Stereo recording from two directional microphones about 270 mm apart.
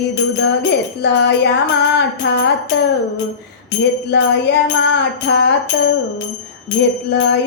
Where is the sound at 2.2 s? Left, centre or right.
Left.